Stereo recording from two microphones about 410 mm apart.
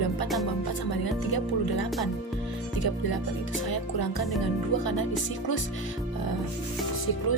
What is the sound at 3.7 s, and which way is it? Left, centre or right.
Speech, left.